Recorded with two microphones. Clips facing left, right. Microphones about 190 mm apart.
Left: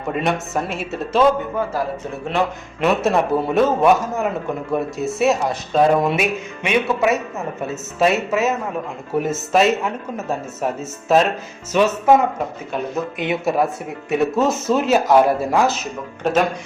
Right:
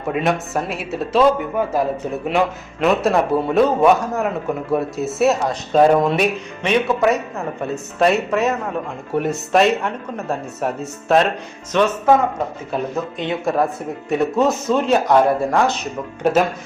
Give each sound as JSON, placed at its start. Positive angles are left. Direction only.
{"t": 0.1, "sound": "speech", "side_deg": 0}
{"t": 1.5, "sound": "a man's voice", "side_deg": -20}
{"t": 2.8, "sound": "speech", "side_deg": 0}
{"t": 6.1, "sound": "speech", "side_deg": 10}
{"t": 13.1, "sound": "speech", "side_deg": 10}